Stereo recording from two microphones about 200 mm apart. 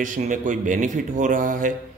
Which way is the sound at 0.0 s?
40° right (ahead or behind).